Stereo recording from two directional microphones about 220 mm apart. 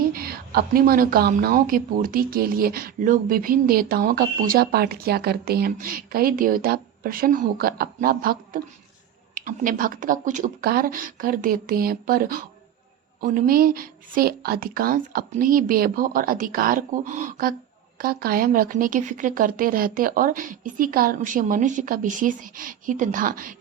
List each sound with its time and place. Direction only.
0.0 s a woman's voice: 45° right (ahead or behind)